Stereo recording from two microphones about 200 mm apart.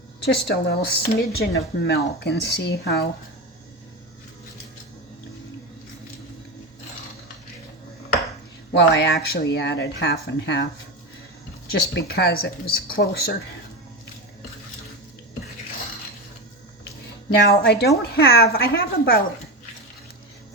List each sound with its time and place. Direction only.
0.4 s speech: 50° left (ahead or behind)
8.7 s speech: 60° left (ahead or behind)
11.9 s a woman's voice: 50° left (ahead or behind)
17.4 s a woman's voice: 55° left (ahead or behind)